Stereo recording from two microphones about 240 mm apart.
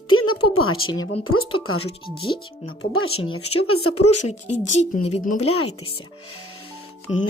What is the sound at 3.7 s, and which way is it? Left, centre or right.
Speech, left.